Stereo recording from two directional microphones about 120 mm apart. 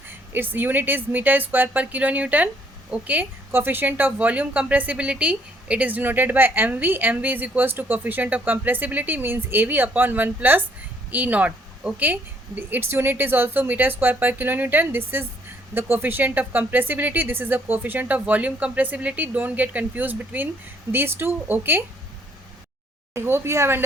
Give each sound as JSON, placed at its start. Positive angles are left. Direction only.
{"t": 0.1, "sound": "a woman's voice", "side_deg": -15}
{"t": 23.1, "sound": "speech", "side_deg": -20}